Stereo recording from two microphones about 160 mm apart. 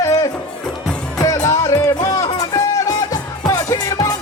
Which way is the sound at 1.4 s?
20° left (ahead or behind).